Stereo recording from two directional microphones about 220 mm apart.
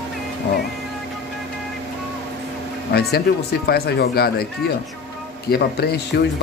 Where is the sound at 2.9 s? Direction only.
45° left (ahead or behind).